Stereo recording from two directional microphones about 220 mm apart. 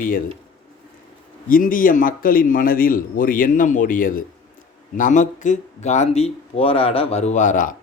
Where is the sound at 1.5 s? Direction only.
40° left (ahead or behind).